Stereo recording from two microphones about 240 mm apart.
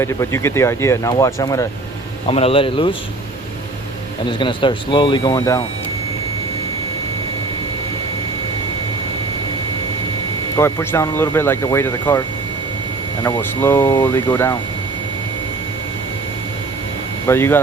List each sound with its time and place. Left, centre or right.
0.0 s speech: centre
2.2 s speech: left
4.3 s speech: centre
10.6 s speech: centre
13.2 s speech: centre
17.2 s speech: centre